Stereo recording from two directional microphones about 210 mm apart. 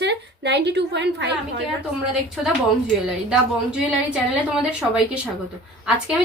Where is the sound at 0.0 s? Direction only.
55° right (ahead or behind).